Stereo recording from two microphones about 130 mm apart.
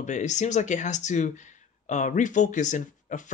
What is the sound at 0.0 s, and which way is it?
Speech, 65° left (ahead or behind).